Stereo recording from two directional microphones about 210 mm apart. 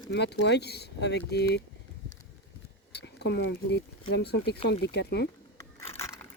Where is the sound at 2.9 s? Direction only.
50° left (ahead or behind).